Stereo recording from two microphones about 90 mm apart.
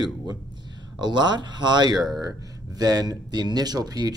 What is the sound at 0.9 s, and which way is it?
Speech, 55° right (ahead or behind).